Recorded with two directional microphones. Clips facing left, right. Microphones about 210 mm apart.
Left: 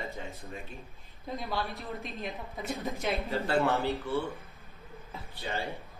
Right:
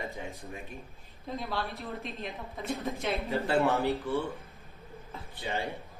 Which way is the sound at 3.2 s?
15° right (ahead or behind).